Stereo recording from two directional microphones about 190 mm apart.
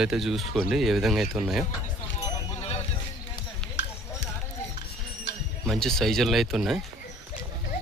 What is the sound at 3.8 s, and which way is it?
Music, 70° left (ahead or behind).